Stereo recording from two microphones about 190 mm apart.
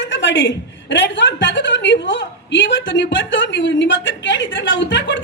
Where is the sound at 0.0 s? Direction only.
70° left (ahead or behind).